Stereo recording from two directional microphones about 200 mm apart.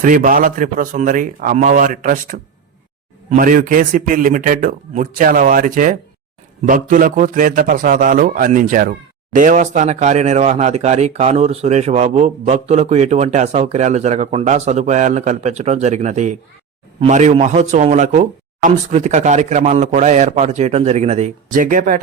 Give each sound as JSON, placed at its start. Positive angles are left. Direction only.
{"t": 0.0, "sound": "a man's voice", "side_deg": -40}